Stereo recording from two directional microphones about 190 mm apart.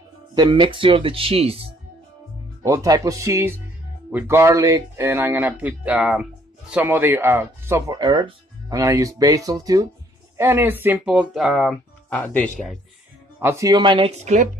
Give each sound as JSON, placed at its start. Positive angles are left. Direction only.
{"t": 0.3, "sound": "speech", "side_deg": -20}
{"t": 2.6, "sound": "speech", "side_deg": -15}
{"t": 13.4, "sound": "speech", "side_deg": -15}